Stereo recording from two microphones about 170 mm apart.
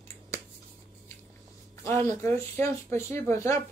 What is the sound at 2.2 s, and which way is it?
Speech, 15° left (ahead or behind).